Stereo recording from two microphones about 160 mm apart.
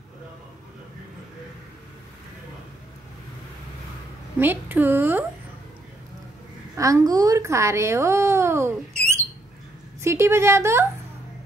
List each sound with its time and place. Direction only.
4.4 s a woman's voice: 10° right (ahead or behind)
6.8 s a woman's voice: 20° right (ahead or behind)